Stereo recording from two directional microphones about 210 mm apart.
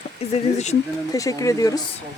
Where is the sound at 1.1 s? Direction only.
15° left (ahead or behind).